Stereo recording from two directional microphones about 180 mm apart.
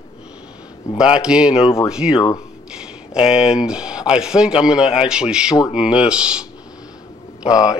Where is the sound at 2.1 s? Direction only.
25° left (ahead or behind).